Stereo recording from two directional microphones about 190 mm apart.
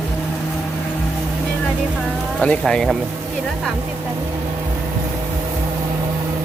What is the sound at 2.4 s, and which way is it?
Speech, 5° left (ahead or behind).